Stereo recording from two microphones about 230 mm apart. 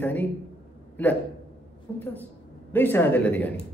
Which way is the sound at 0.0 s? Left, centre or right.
Centre.